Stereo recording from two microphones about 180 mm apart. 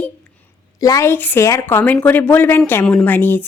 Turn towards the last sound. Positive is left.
turn(degrees=10)  # may be behind; listen again after turning